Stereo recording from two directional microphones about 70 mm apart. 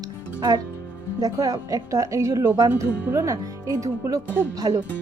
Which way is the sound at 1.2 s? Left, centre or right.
Right.